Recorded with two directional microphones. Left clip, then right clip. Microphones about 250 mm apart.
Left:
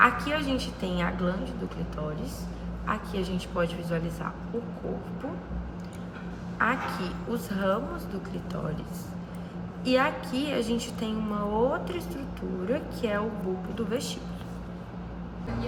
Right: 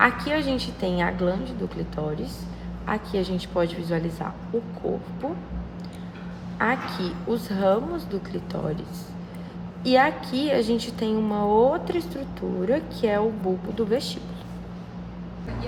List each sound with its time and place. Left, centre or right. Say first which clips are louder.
0.0 s a woman's voice: right 2 dB; right
2.8 s a woman's voice: right 5 dB; right
6.6 s a woman's voice: right 2 dB; right
9.8 s a woman's voice: right 5 dB; right